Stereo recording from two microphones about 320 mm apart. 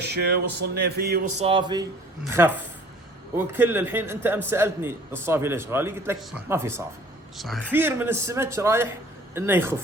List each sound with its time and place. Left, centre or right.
0.0 s speech: right
1.5 s a man's voice: centre